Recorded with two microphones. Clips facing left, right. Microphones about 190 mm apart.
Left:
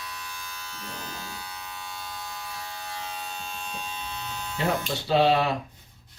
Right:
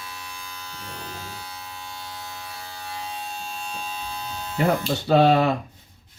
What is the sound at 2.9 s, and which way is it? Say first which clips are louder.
Electric shaver: right 5 dB; 30° right (ahead or behind).